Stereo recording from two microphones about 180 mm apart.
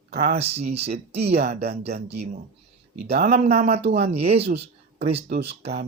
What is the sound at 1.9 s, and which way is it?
Speech, 65° right (ahead or behind).